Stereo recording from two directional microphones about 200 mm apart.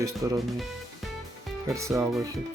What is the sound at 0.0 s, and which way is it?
Speech, 15° right (ahead or behind).